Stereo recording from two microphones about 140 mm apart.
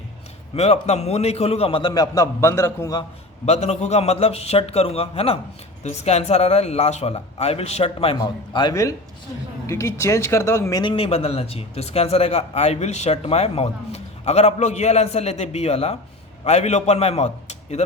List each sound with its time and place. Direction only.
0.5 s speech: 50° left (ahead or behind)
1.9 s speech: 25° left (ahead or behind)
3.4 s speech: 50° left (ahead or behind); by 10.9 s 25° left (ahead or behind)
10.9 s speech: 45° left (ahead or behind)